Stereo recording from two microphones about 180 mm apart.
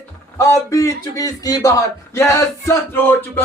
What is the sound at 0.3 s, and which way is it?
A man's voice, 15° left (ahead or behind).